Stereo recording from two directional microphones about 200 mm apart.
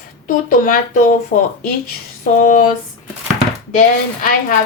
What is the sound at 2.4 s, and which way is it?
Speech, 40° left (ahead or behind).